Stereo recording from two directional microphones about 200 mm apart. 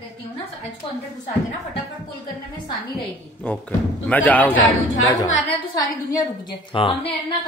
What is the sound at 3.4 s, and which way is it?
A man's voice, 10° left (ahead or behind).